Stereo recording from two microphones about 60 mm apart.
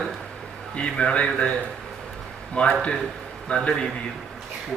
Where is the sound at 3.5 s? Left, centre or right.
Centre.